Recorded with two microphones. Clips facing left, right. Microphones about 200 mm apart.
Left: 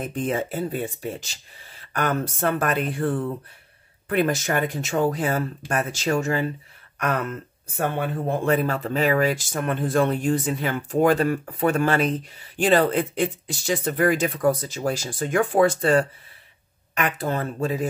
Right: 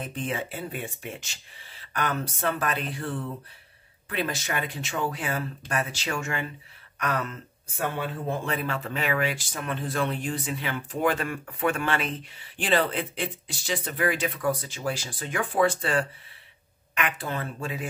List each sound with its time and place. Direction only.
0.0 s speech: 45° left (ahead or behind)
7.0 s speech: 50° left (ahead or behind)
8.5 s speech: 40° left (ahead or behind)